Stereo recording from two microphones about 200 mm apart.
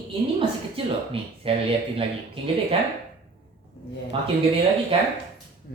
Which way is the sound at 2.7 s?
25° right (ahead or behind).